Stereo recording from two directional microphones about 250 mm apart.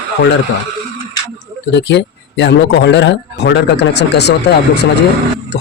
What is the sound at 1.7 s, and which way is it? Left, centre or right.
A man's voice, left.